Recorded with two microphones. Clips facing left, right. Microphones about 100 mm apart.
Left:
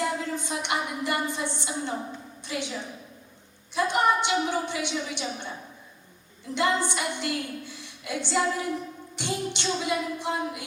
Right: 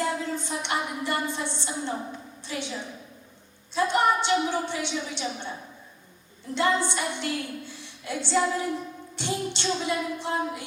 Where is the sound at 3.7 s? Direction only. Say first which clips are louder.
Right 1 dB; 15° left (ahead or behind).